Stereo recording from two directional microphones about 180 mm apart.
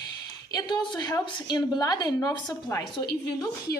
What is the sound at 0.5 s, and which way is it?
A woman's voice, 20° left (ahead or behind).